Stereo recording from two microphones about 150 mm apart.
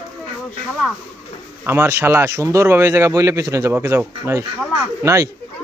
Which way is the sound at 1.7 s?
15° right (ahead or behind).